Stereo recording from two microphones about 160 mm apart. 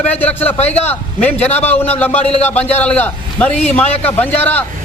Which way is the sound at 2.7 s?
10° left (ahead or behind).